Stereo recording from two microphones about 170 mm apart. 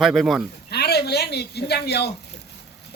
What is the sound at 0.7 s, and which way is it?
A man's voice, 75° left (ahead or behind).